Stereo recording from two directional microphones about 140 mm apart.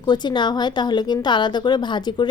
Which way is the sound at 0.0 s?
30° left (ahead or behind).